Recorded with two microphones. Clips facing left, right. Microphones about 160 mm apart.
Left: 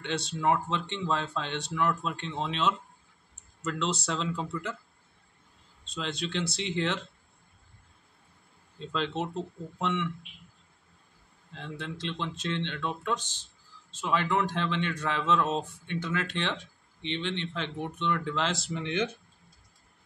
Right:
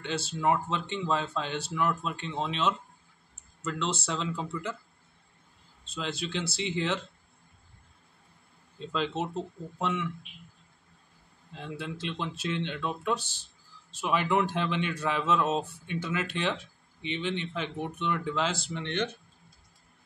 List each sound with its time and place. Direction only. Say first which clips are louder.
0.0 s speech: even; 5° right (ahead or behind)
5.9 s speech: even; centre (ahead or behind)
8.7 s speech: right 1 dB; 5° right (ahead or behind)
11.5 s speech: right 1 dB; 10° right (ahead or behind)